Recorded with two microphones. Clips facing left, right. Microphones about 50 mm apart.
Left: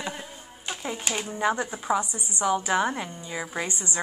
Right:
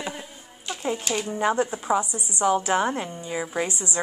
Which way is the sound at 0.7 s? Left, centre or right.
Centre.